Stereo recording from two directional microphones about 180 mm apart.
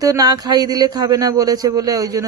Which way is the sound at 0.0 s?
20° right (ahead or behind).